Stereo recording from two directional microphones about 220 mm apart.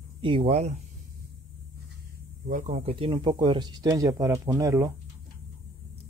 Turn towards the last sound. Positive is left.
turn(degrees=-15)  # may be behind; listen again after turning